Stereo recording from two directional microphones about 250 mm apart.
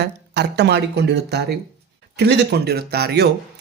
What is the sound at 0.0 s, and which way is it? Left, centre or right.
A man's voice, right.